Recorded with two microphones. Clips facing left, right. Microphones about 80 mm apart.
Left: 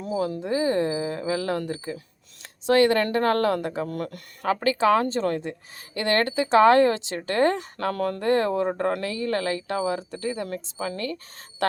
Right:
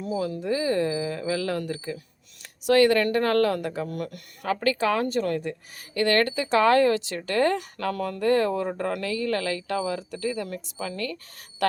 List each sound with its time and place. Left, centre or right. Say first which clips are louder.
0.0 s speech: left 1 dB; left
10.0 s speech: even; left